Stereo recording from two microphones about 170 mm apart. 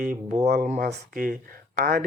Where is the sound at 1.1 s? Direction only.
55° right (ahead or behind).